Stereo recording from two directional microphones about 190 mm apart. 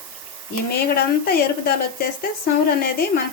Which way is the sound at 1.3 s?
55° left (ahead or behind).